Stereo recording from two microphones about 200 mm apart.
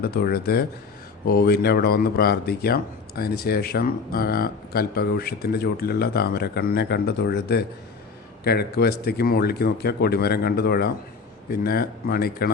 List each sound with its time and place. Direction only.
0.0 s speech: 50° left (ahead or behind)